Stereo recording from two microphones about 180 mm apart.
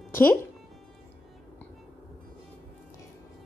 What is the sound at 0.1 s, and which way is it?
Speech, 10° left (ahead or behind).